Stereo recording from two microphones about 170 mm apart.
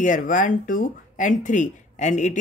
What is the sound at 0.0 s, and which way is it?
Speech, 50° left (ahead or behind).